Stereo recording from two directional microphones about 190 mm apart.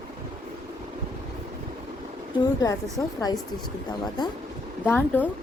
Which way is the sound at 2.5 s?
15° left (ahead or behind).